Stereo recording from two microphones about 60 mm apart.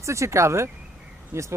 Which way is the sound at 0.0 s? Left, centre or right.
Right.